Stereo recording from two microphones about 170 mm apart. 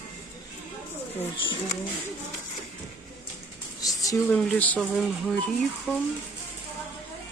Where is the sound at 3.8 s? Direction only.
20° left (ahead or behind).